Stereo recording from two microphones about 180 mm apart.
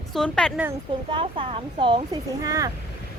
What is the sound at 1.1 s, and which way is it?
Speech, 30° right (ahead or behind).